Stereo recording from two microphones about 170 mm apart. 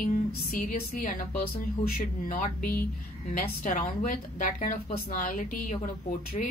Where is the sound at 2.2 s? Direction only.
55° left (ahead or behind).